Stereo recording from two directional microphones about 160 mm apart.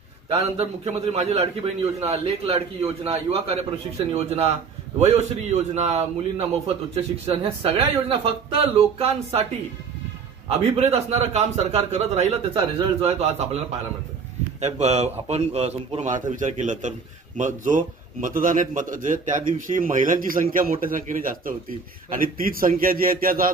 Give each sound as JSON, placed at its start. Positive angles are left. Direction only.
{"t": 0.3, "sound": "a man's voice", "side_deg": -40}
{"t": 10.6, "sound": "a man's voice", "side_deg": -40}